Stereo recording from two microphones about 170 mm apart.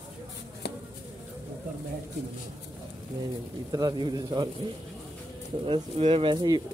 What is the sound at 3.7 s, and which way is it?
Speech, 25° right (ahead or behind).